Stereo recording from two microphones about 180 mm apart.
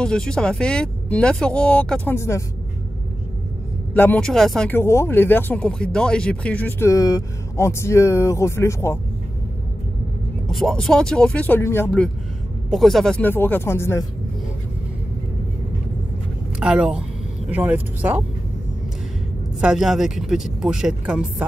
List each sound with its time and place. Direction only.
0.0 s speech: 5° left (ahead or behind)
3.9 s speech: 10° left (ahead or behind)
10.5 s speech: centre (ahead or behind)
16.5 s speech: 5° right (ahead or behind)
19.6 s speech: 5° right (ahead or behind)